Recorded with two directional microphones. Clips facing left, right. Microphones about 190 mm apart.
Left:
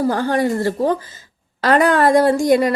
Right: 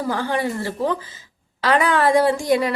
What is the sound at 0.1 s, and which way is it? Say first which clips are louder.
A woman's voice: left 5 dB; 45° left (ahead or behind).